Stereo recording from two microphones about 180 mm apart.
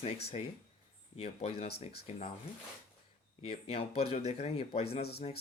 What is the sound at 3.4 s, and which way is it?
Speech, 30° left (ahead or behind).